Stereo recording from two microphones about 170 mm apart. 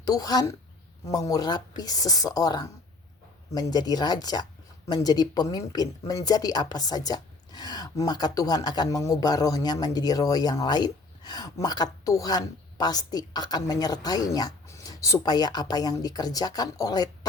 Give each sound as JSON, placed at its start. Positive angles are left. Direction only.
{"t": 0.0, "sound": "speech", "side_deg": 20}